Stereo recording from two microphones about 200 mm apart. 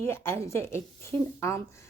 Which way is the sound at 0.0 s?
10° left (ahead or behind).